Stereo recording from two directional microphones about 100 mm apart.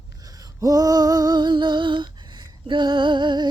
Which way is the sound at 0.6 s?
35° right (ahead or behind).